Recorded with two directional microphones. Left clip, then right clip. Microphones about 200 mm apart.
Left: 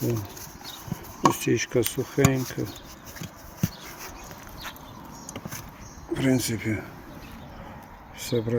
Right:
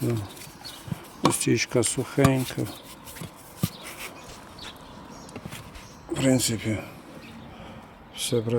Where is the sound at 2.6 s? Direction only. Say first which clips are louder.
Even; 90° right.